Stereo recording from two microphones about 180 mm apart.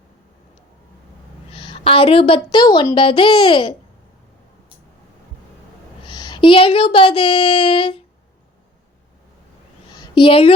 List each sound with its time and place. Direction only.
1.5 s a woman's voice: 30° left (ahead or behind)
6.1 s speech: 25° left (ahead or behind)
9.9 s a sound: 25° left (ahead or behind)